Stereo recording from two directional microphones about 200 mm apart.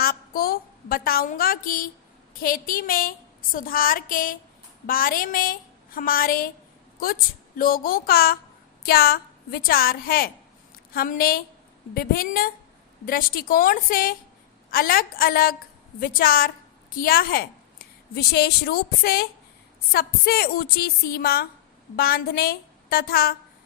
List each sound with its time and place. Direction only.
0.0 s a woman's voice: 45° left (ahead or behind)
7.6 s a woman's voice: 45° left (ahead or behind)